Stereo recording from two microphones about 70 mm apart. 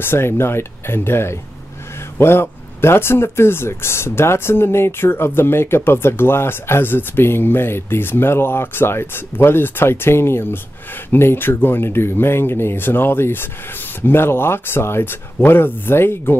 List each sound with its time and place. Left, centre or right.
0.0 s speech: left